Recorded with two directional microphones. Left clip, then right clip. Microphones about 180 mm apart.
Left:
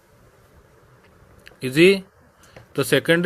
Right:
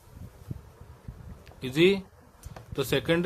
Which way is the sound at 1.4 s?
35° left (ahead or behind).